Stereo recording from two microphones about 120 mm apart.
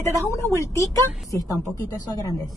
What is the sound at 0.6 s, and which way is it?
Speech, 25° left (ahead or behind).